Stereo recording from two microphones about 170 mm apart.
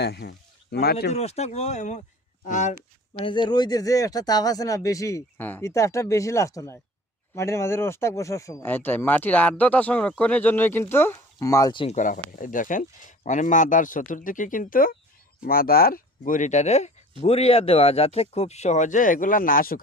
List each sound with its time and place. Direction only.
0.0 s speech: 70° left (ahead or behind)
1.1 s speech: 40° left (ahead or behind)
3.2 s speech: 30° left (ahead or behind)
11.9 s speech: 50° left (ahead or behind)